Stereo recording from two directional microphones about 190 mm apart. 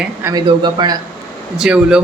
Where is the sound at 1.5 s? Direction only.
5° right (ahead or behind).